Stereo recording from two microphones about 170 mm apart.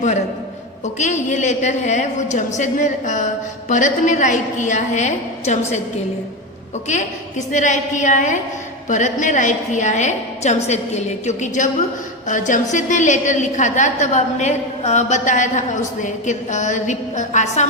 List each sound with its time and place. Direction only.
0.9 s a woman's voice: 45° left (ahead or behind)
6.8 s a woman's voice: 45° left (ahead or behind)